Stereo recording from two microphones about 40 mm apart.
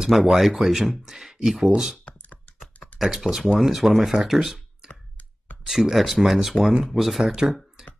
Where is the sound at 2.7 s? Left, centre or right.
Left.